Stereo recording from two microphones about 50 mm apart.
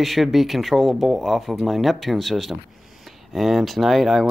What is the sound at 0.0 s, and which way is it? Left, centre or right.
Speech, centre.